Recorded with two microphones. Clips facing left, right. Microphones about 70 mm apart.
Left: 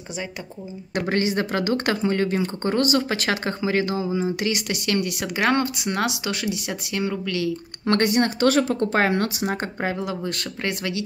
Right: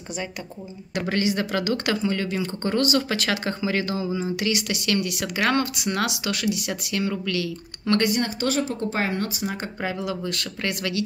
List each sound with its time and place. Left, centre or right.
1.0 s speech: left
7.9 s speech: left
9.8 s speech: left